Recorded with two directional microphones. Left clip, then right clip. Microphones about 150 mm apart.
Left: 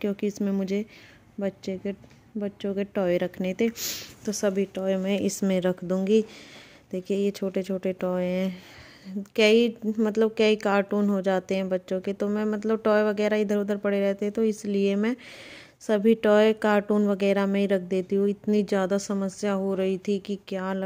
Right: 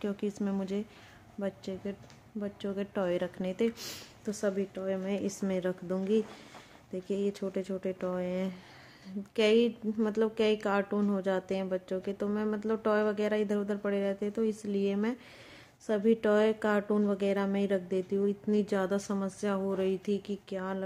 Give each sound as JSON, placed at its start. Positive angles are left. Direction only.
{"t": 0.0, "sound": "speech", "side_deg": 10}
{"t": 4.2, "sound": "speech", "side_deg": 25}
{"t": 4.6, "sound": "speech", "side_deg": 35}